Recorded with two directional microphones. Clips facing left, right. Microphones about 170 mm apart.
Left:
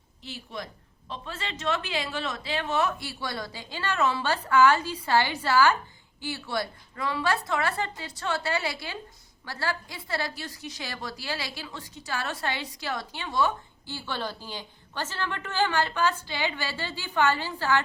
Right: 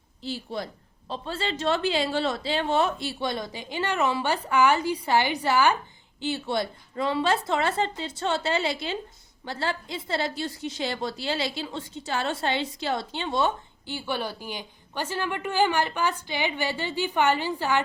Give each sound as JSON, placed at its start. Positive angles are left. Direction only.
{"t": 0.2, "sound": "a woman's voice", "side_deg": -30}